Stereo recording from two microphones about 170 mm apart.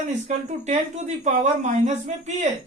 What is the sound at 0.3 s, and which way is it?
Speech, 45° right (ahead or behind).